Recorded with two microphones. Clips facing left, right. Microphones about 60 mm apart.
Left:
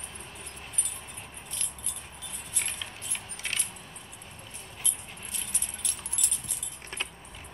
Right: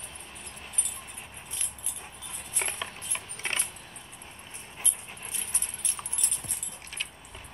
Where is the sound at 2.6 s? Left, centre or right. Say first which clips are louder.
Right 4 dB; right.